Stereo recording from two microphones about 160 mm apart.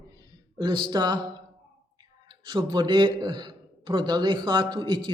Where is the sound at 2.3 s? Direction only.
30° right (ahead or behind).